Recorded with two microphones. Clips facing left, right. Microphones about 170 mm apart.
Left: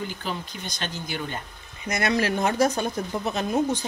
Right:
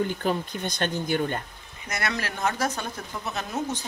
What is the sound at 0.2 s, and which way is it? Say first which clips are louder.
Speech: right 6 dB; 55° right (ahead or behind).